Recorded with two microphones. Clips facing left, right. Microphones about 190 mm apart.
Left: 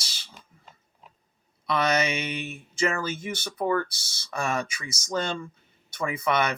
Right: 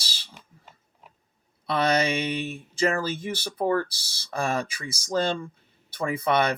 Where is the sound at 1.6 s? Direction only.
30° right (ahead or behind).